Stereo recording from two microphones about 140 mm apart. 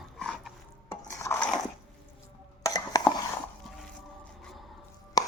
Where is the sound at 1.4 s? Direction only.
5° left (ahead or behind).